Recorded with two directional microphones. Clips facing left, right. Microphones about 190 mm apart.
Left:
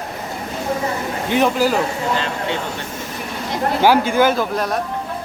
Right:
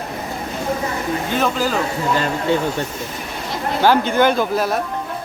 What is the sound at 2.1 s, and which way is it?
Speech, 45° right (ahead or behind).